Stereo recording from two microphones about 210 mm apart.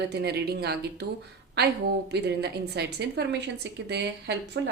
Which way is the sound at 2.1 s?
50° right (ahead or behind).